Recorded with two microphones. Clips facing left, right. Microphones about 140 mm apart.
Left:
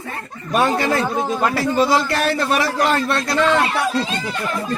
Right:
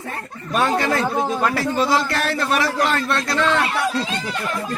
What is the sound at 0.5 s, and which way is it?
A man's voice, 5° left (ahead or behind).